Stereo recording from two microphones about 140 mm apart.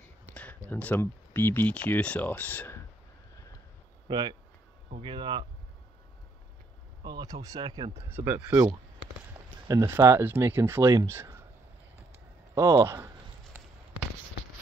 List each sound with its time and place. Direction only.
0.3 s a sound: 10° left (ahead or behind)
0.7 s speech: 15° left (ahead or behind)
4.1 s speech: 30° right (ahead or behind)
7.0 s speech: 30° right (ahead or behind)
7.9 s speech: 15° right (ahead or behind)
9.7 s speech: 20° right (ahead or behind)
12.5 s speech: 20° right (ahead or behind)